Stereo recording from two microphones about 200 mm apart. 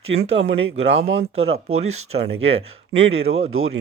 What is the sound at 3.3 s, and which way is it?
Speech, 90° right.